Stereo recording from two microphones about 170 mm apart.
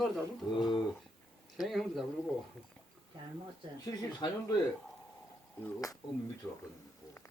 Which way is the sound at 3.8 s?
25° left (ahead or behind).